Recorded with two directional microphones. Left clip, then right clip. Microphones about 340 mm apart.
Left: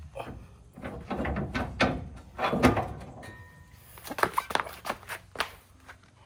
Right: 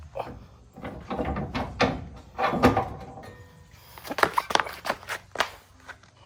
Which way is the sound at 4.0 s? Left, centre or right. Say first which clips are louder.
Right 4 dB; centre.